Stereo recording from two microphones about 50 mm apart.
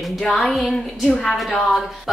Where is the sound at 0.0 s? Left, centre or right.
Centre.